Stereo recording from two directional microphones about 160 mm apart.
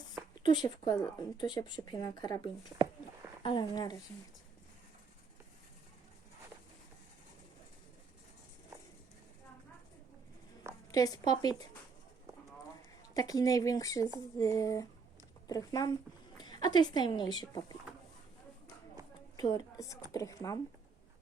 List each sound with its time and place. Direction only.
0.9 s speech: 25° left (ahead or behind)
10.9 s speech: 25° left (ahead or behind)
13.1 s speech: 20° left (ahead or behind)
19.0 s a sound: 20° right (ahead or behind)
19.4 s a woman's voice: 25° left (ahead or behind)